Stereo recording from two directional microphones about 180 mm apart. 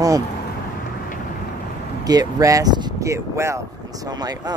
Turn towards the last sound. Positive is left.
turn(degrees=-20)  # may be behind; listen again after turning